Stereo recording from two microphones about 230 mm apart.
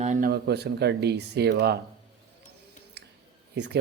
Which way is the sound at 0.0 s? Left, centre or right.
Right.